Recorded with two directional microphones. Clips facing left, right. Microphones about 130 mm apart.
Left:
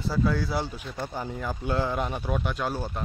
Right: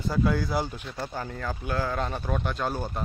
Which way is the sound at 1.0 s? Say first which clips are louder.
Left 1 dB; 15° left (ahead or behind).